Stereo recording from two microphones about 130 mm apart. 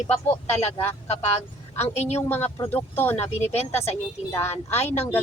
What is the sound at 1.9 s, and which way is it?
Speech, 55° left (ahead or behind).